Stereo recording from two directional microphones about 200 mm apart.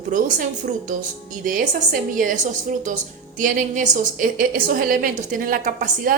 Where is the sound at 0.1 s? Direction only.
40° right (ahead or behind).